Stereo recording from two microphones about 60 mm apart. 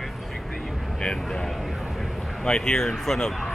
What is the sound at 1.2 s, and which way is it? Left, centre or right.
Vehicle, centre.